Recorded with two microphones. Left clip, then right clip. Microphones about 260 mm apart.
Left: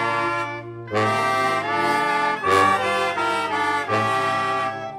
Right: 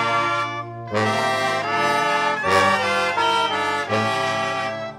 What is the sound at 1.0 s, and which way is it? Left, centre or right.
Music, centre.